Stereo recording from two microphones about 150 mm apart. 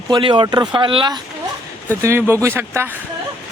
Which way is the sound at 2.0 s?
15° right (ahead or behind).